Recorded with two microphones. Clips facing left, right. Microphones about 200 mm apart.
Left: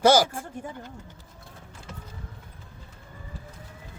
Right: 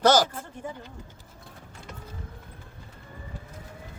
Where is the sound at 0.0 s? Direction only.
10° left (ahead or behind).